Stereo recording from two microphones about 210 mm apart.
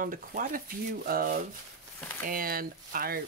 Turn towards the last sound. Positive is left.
turn(degrees=-45)  # may be behind; listen again after turning